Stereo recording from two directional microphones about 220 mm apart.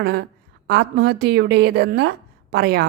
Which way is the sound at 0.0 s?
45° right (ahead or behind).